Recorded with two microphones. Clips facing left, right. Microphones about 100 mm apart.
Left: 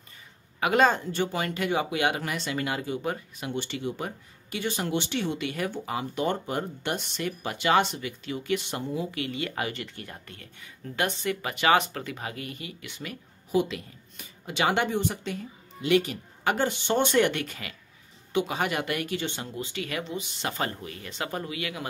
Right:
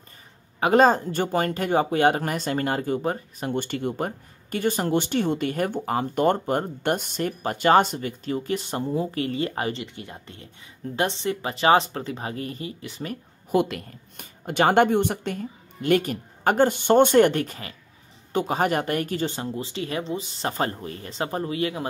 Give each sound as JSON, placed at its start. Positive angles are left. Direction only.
{"t": 0.6, "sound": "speech", "side_deg": -35}
{"t": 9.8, "sound": "speech", "side_deg": -20}
{"t": 13.5, "sound": "speech", "side_deg": -55}